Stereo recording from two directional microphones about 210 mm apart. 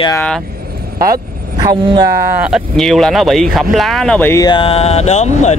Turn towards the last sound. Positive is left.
turn(degrees=35)  # may be behind; listen again after turning